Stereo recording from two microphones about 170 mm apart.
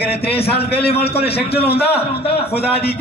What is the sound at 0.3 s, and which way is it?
Speech, 35° left (ahead or behind).